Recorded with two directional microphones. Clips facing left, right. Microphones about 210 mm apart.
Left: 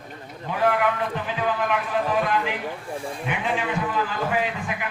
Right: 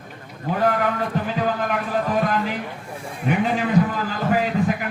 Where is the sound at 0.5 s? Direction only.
40° right (ahead or behind).